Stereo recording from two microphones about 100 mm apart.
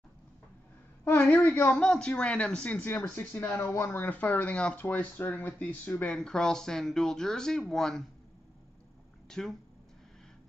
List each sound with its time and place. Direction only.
1.4 s speech: 20° left (ahead or behind)
1.8 s speech: 10° left (ahead or behind)
6.1 s speech: 5° left (ahead or behind)
9.3 s speech: 5° left (ahead or behind)